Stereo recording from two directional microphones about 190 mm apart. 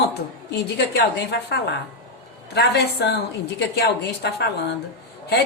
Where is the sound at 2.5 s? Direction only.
60° left (ahead or behind).